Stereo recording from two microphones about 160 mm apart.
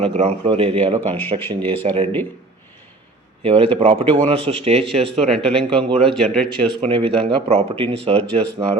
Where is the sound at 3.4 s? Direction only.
35° right (ahead or behind).